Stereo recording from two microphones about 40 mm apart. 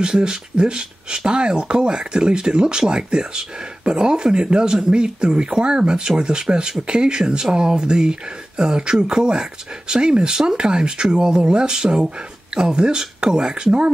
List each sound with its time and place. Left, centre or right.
0.0 s speech: centre